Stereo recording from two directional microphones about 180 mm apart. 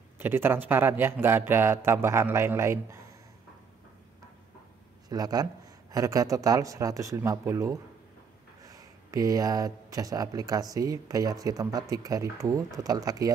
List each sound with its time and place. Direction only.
0.2 s speech: 10° right (ahead or behind)
5.1 s speech: 20° right (ahead or behind)